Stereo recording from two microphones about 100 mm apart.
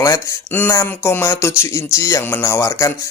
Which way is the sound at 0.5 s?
25° left (ahead or behind).